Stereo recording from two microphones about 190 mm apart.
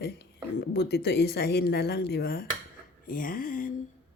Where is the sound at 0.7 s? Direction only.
60° left (ahead or behind).